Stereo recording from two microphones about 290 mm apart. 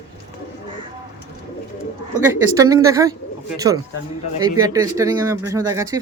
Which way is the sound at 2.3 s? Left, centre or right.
Centre.